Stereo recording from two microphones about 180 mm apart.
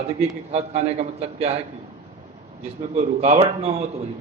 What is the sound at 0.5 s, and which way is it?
A man's voice, 35° right (ahead or behind).